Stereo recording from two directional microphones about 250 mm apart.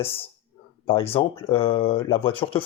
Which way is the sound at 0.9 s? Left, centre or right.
Left.